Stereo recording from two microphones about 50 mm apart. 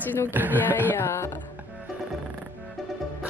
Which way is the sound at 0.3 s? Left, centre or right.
Right.